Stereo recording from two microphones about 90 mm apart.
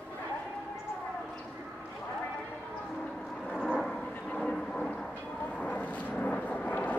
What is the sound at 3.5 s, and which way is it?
Vehicle, 5° left (ahead or behind).